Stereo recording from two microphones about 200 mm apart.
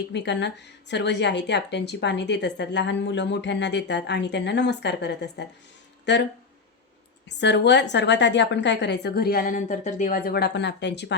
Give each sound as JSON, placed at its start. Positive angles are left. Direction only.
{"t": 0.1, "sound": "a woman's voice", "side_deg": 60}
{"t": 7.3, "sound": "a woman's voice", "side_deg": 60}